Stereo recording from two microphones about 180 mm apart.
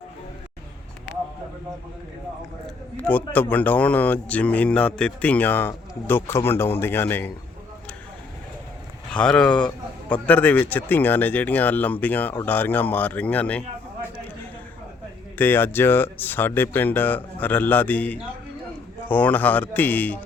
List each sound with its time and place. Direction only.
3.0 s a man's voice: 10° left (ahead or behind)
9.1 s a man's voice: 5° left (ahead or behind)
15.4 s a man's voice: 10° left (ahead or behind)